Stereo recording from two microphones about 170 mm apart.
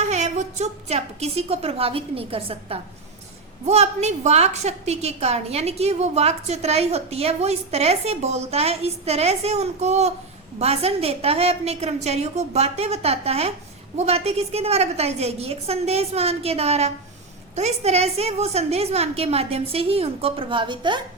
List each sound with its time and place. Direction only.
0.0 s a woman's voice: 40° right (ahead or behind)